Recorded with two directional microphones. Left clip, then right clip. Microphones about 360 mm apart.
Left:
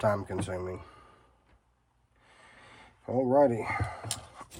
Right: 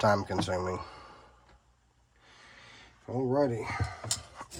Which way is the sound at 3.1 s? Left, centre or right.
Centre.